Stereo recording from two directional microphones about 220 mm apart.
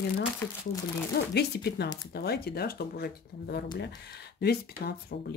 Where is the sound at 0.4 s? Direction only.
10° left (ahead or behind).